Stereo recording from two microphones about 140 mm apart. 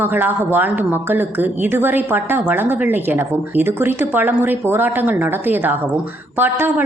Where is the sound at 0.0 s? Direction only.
15° right (ahead or behind).